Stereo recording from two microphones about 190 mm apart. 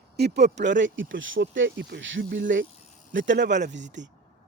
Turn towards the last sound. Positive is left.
turn(degrees=-70)  # may be behind; listen again after turning